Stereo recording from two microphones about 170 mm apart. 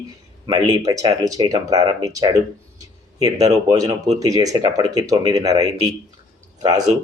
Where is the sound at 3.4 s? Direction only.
20° right (ahead or behind).